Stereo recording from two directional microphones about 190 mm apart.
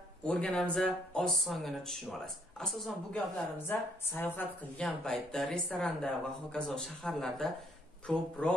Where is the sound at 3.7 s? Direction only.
10° left (ahead or behind).